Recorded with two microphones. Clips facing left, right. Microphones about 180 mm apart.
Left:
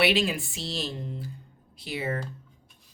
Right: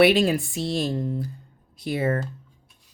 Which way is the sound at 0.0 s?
50° right (ahead or behind).